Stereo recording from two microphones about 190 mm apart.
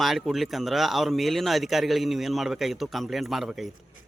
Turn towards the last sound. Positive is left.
turn(degrees=0)  # may be behind; listen again after turning